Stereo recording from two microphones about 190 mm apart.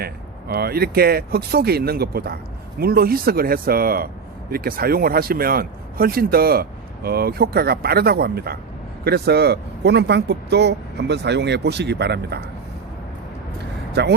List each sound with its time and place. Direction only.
0.0 s speech: 55° right (ahead or behind)
14.0 s speech: 60° right (ahead or behind)